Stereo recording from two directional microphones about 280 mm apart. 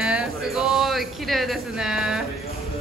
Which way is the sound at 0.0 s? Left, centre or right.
Centre.